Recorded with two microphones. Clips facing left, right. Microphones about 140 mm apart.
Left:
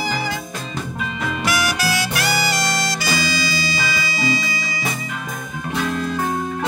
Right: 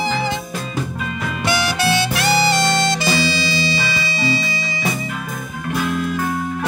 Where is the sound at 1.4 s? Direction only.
25° right (ahead or behind).